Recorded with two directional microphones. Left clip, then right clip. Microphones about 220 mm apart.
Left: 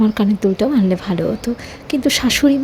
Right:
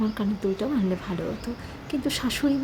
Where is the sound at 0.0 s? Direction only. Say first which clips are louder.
Left 11 dB; 30° left (ahead or behind).